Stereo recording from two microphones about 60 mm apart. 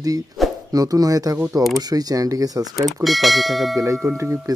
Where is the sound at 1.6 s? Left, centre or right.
Right.